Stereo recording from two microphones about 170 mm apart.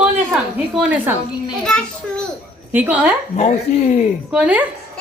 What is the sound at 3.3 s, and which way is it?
Speech, 40° left (ahead or behind).